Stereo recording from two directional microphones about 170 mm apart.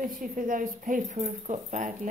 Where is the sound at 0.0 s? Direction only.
55° right (ahead or behind).